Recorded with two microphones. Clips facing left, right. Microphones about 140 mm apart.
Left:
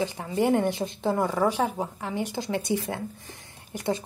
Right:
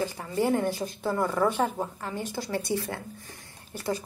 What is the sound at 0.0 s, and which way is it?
A woman's voice, 15° left (ahead or behind).